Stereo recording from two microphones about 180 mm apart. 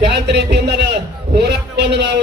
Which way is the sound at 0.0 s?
70° right (ahead or behind).